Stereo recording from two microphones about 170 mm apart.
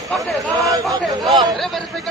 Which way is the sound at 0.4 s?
20° right (ahead or behind).